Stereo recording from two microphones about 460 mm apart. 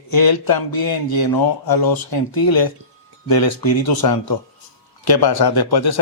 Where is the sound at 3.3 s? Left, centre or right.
Left.